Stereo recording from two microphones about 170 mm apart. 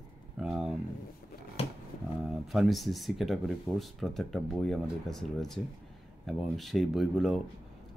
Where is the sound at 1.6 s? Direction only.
35° left (ahead or behind).